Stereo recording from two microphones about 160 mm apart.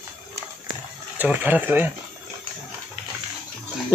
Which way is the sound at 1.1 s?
10° right (ahead or behind).